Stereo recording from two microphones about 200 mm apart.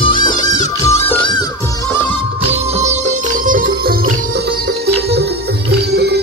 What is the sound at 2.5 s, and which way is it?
Music, 30° right (ahead or behind).